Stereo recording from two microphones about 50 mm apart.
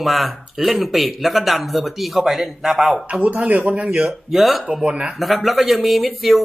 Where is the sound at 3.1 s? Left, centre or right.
Right.